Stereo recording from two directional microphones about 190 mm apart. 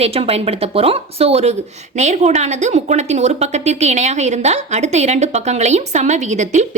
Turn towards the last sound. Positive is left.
turn(degrees=-40)  # may be behind; listen again after turning